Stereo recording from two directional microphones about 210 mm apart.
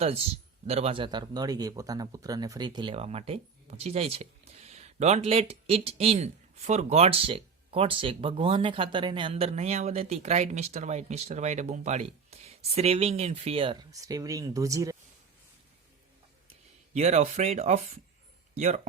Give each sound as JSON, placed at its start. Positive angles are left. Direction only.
{"t": 0.0, "sound": "speech", "side_deg": -30}
{"t": 16.5, "sound": "speech", "side_deg": -30}